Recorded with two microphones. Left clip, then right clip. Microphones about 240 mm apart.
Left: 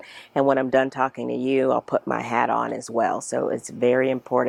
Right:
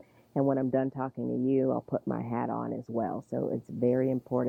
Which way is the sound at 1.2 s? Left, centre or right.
Left.